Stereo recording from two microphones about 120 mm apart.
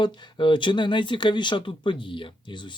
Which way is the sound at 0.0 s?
40° left (ahead or behind).